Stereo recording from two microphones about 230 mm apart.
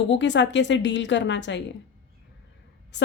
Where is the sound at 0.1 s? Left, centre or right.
Left.